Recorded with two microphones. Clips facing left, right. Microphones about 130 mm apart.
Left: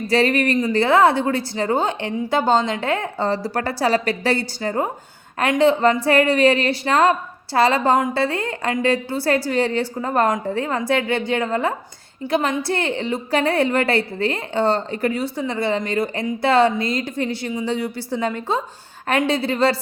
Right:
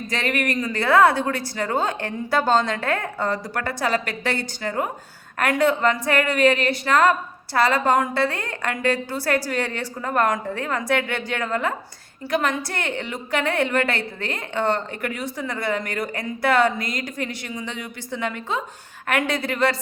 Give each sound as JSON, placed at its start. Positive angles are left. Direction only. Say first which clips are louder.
{"t": 0.1, "sound": "a woman's voice", "louder": "left 7 dB", "side_deg": 30}